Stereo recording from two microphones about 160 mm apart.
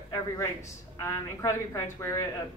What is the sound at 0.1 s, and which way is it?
A woman's voice, 20° left (ahead or behind).